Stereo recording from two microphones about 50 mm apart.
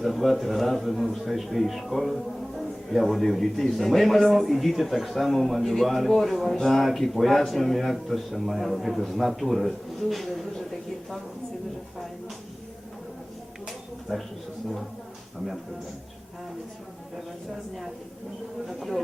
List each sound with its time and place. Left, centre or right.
0.0 s a man's voice: centre
14.1 s a man's voice: centre
18.7 s a man's voice: centre